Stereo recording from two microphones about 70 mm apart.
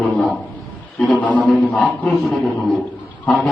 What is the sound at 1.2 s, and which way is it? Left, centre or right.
Speech, left.